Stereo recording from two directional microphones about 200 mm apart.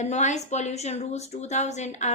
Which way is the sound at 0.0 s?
35° left (ahead or behind).